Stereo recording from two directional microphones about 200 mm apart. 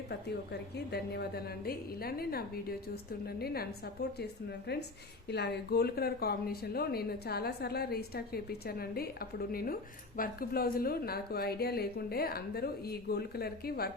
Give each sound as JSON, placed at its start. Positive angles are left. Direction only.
{"t": 0.9, "sound": "speech", "side_deg": 55}
{"t": 4.7, "sound": "a woman's voice", "side_deg": 55}